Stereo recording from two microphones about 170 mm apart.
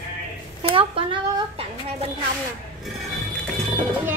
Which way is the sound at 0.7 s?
30° right (ahead or behind).